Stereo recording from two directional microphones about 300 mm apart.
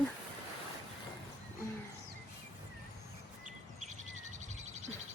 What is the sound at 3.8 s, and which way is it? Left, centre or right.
Bird, right.